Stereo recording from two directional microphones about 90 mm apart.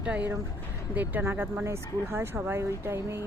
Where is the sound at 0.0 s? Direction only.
15° right (ahead or behind).